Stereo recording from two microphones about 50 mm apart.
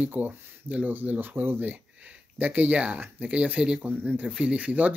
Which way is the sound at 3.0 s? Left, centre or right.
Right.